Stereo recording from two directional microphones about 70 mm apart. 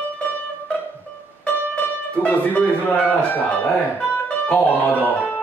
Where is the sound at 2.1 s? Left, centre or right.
Left.